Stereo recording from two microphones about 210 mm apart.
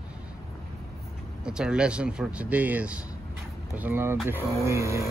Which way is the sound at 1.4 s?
5° right (ahead or behind).